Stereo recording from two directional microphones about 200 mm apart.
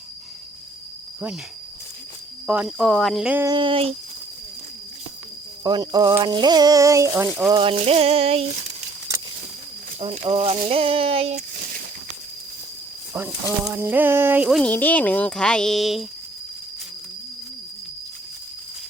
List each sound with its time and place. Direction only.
2.5 s speech: 5° right (ahead or behind)
3.5 s speech: 25° right (ahead or behind)
5.6 s speech: 20° right (ahead or behind)
7.6 s speech: 30° right (ahead or behind)
10.0 s speech: 30° right (ahead or behind)
13.1 s speech: 10° right (ahead or behind)
14.6 s speech: 10° left (ahead or behind)